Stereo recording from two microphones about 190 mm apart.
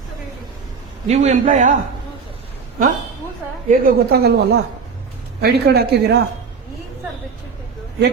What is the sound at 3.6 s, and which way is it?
A man's voice, 45° right (ahead or behind).